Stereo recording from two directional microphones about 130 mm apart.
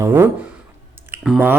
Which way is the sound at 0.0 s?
20° right (ahead or behind).